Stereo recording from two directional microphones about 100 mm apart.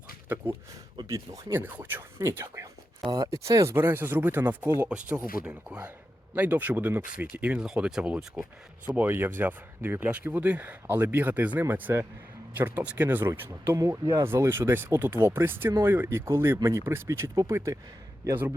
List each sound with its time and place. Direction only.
0.3 s speech: 20° right (ahead or behind)
1.0 s speech: 30° right (ahead or behind); by 8.1 s 10° right (ahead or behind)
8.9 s speech: 20° right (ahead or behind)